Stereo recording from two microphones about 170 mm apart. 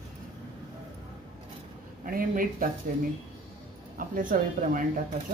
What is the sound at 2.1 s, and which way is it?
Speech, 55° right (ahead or behind).